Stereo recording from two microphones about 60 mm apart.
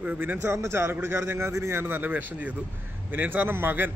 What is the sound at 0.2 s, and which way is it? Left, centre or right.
A man's voice, right.